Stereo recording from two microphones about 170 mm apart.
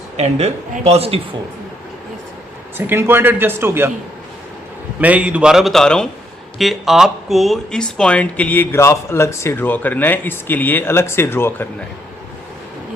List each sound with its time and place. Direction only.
0.2 s speech: 40° right (ahead or behind)
2.7 s a man's voice: 10° right (ahead or behind)
4.9 s a man's voice: 10° right (ahead or behind); by 11.7 s 15° left (ahead or behind)